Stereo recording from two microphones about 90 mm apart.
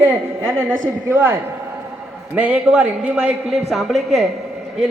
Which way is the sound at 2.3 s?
15° right (ahead or behind).